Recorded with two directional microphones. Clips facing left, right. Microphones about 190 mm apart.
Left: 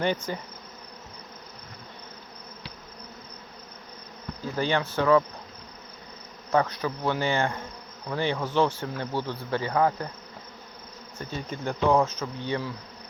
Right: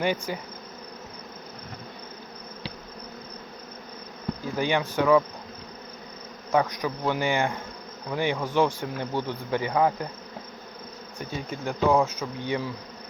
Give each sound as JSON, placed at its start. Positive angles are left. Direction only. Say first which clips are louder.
{"t": 0.0, "sound": "cricket", "louder": "even", "side_deg": -10}
{"t": 4.5, "sound": "cricket", "louder": "right 1 dB", "side_deg": -15}
{"t": 6.5, "sound": "cricket", "louder": "even", "side_deg": -10}
{"t": 11.2, "sound": "cricket", "louder": "right 1 dB", "side_deg": -10}